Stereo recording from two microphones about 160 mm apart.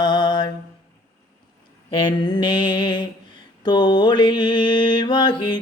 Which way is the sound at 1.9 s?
30° left (ahead or behind).